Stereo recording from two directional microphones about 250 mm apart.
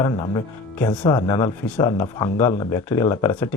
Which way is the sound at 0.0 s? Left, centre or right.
Centre.